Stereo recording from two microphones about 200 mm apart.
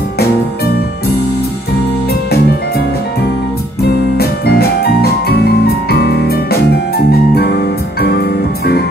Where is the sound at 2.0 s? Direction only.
50° left (ahead or behind).